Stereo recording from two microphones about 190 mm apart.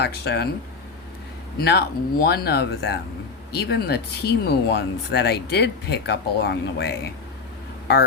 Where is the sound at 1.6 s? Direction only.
55° left (ahead or behind).